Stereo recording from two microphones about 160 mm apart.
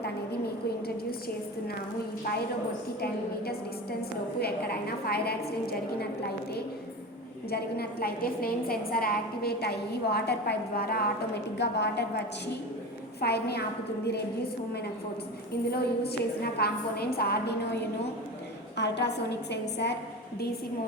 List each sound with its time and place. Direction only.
4.4 s a woman's voice: 80° left
7.5 s a woman's voice: 80° left
11.5 s a woman's voice: 90° left
13.1 s a woman's voice: 90° left
15.7 s a woman's voice: 80° left
18.8 s a woman's voice: 90° left